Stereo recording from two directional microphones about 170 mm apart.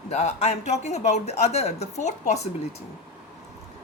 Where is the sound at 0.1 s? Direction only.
40° left (ahead or behind).